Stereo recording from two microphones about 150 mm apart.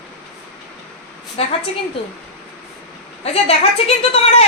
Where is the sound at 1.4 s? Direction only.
40° left (ahead or behind).